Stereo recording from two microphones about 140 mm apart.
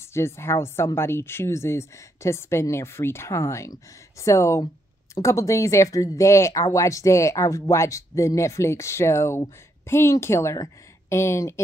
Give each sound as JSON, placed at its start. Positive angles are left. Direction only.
{"t": 0.1, "sound": "speech", "side_deg": 20}